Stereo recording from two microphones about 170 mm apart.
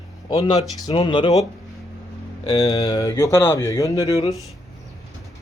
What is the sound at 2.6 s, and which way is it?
Speech, 20° left (ahead or behind).